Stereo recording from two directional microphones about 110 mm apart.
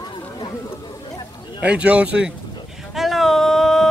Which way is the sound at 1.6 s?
10° right (ahead or behind).